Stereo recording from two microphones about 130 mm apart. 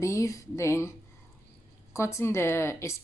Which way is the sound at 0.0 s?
25° left (ahead or behind).